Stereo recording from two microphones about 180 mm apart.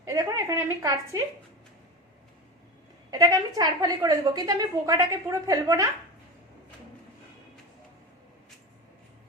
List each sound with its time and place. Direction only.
0.0 s a woman's voice: 20° right (ahead or behind)
3.1 s a woman's voice: 20° right (ahead or behind)